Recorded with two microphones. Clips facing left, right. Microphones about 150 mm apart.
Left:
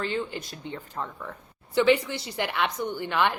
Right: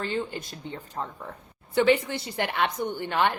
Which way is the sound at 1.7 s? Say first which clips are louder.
Even; 50° right (ahead or behind).